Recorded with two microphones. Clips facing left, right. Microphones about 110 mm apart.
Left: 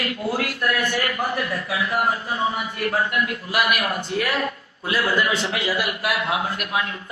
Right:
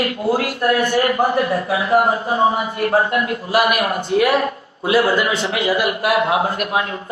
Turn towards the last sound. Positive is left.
turn(degrees=-30)  # may be behind; listen again after turning